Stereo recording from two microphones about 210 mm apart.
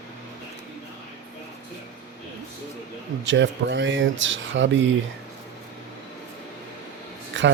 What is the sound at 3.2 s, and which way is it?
Speech, 60° right (ahead or behind).